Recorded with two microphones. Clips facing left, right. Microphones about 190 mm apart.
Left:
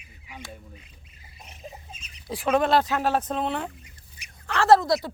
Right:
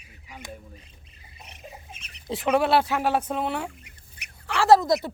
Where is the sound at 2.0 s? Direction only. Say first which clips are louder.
Right 1 dB; 60° right (ahead or behind).